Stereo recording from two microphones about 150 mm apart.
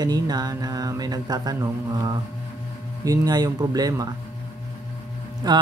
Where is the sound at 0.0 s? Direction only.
25° right (ahead or behind).